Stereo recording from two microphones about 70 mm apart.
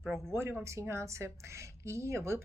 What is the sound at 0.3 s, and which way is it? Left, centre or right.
Speech, right.